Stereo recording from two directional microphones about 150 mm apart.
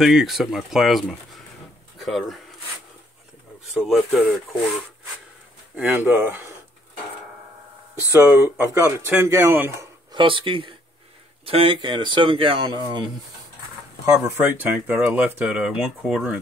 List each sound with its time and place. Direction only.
0.0 s speech: centre (ahead or behind)
3.7 s speech: centre (ahead or behind)
5.8 s speech: 15° right (ahead or behind)
8.1 s speech: 15° right (ahead or behind)
10.1 s speech: 35° right (ahead or behind)
14.2 s speech: 15° right (ahead or behind)